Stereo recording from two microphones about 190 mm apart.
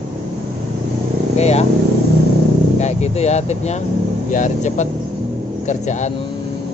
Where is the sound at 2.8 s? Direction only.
35° left (ahead or behind).